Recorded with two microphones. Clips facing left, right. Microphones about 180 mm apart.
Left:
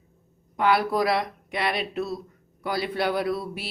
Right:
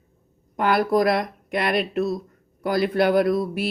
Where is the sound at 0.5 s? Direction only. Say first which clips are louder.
Right 3 dB; 45° right (ahead or behind).